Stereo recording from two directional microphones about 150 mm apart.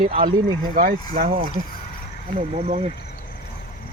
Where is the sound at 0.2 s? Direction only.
70° right (ahead or behind).